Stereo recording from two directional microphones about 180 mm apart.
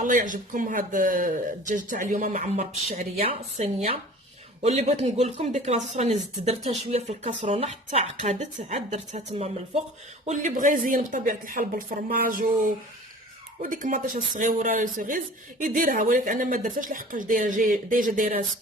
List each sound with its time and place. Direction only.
0.0 s a woman's voice: 45° right (ahead or behind)
13.6 s speech: 50° right (ahead or behind)